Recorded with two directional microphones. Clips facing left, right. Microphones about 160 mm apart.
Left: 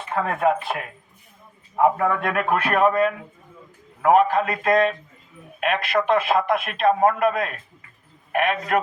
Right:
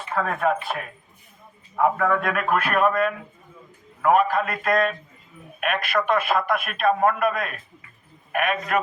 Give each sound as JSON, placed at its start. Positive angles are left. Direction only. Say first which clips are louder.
{"t": 0.1, "sound": "a man's voice", "louder": "left 2 dB", "side_deg": 20}